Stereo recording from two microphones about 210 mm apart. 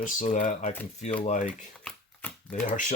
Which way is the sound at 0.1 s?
40° left (ahead or behind).